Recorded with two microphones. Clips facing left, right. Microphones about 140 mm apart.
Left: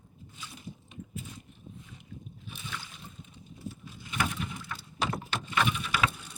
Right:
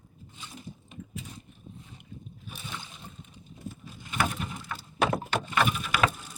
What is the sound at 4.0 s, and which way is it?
Boat, 45° right (ahead or behind).